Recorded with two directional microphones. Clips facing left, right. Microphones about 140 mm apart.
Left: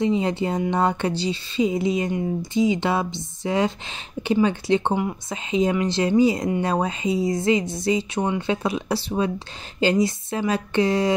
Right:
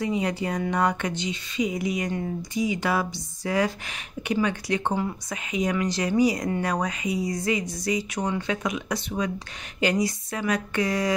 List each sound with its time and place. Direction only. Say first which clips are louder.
0.0 s speech: left 5 dB; 25° left (ahead or behind)